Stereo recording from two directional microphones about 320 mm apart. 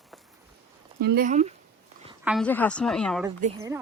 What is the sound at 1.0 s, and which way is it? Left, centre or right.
Speech, right.